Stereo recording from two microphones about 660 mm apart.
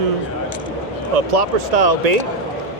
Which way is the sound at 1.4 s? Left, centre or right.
Right.